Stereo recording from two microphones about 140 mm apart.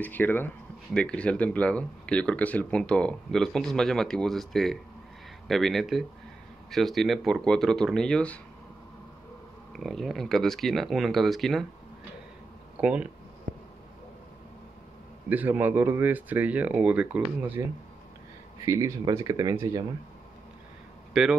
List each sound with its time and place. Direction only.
0.0 s speech: 15° left (ahead or behind)
9.8 s speech: centre (ahead or behind)
12.7 s speech: 10° right (ahead or behind)
15.2 s speech: 10° right (ahead or behind)
18.7 s speech: 25° right (ahead or behind)
21.1 s speech: 5° right (ahead or behind)